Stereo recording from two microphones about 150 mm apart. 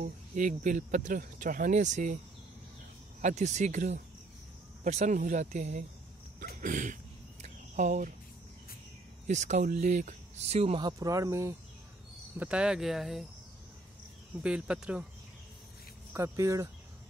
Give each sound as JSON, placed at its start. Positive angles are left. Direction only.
{"t": 0.0, "sound": "speech", "side_deg": -55}
{"t": 3.2, "sound": "speech", "side_deg": -50}
{"t": 6.4, "sound": "speech", "side_deg": -75}
{"t": 7.4, "sound": "cricket", "side_deg": -50}
{"t": 9.3, "sound": "speech", "side_deg": -50}
{"t": 10.9, "sound": "speech", "side_deg": -20}
{"t": 12.4, "sound": "speech", "side_deg": -5}
{"t": 14.4, "sound": "speech", "side_deg": -5}
{"t": 16.1, "sound": "speech", "side_deg": -20}